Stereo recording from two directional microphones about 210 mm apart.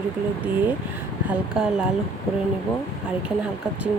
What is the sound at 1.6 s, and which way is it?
Speech, 5° right (ahead or behind).